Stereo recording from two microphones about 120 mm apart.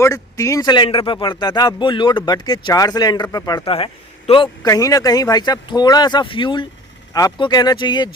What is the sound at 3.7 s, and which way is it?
Speech, 50° left (ahead or behind).